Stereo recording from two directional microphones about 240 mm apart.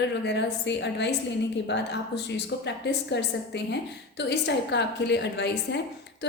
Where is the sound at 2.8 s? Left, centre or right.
Left.